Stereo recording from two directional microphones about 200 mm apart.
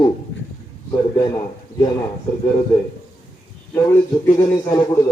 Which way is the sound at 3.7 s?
15° left (ahead or behind).